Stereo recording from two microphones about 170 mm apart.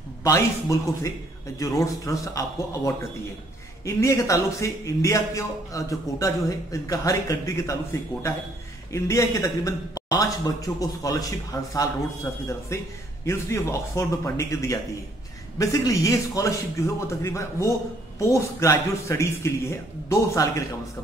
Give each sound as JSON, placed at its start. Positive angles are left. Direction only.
{"t": 0.2, "sound": "a man's voice", "side_deg": 20}
{"t": 8.9, "sound": "a man's voice", "side_deg": 20}